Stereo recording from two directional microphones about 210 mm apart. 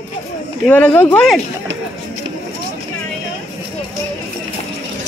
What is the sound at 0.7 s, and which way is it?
Speech, 10° left (ahead or behind).